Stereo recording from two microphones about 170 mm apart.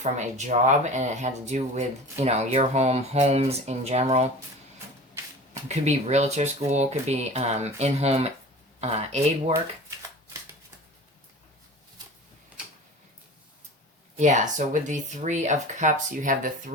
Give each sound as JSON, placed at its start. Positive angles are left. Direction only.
{"t": 0.0, "sound": "speech", "side_deg": -45}
{"t": 5.6, "sound": "speech", "side_deg": -40}
{"t": 14.2, "sound": "speech", "side_deg": -45}